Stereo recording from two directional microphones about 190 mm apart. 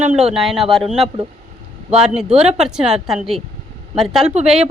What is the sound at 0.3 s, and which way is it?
A woman's voice, centre (ahead or behind).